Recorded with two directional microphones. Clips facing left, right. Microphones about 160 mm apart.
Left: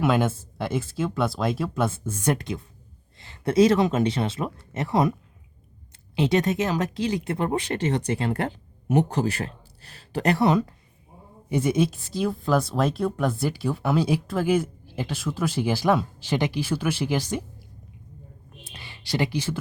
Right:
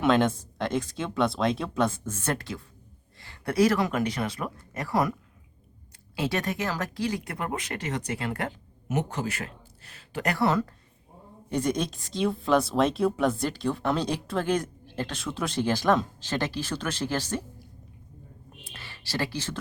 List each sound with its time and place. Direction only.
0.0 s speech: 5° left (ahead or behind); by 5.1 s 25° left (ahead or behind)
6.1 s speech: 20° left (ahead or behind)
18.6 s a sound: 15° left (ahead or behind)